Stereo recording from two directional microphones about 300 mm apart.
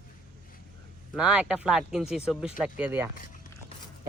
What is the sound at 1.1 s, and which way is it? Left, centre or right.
Speech, centre.